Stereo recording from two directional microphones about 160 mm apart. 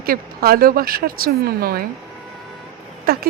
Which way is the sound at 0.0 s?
70° right (ahead or behind).